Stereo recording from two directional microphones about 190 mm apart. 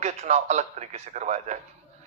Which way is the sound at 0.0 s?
35° right (ahead or behind).